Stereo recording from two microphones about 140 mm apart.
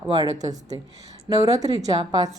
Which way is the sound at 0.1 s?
30° right (ahead or behind).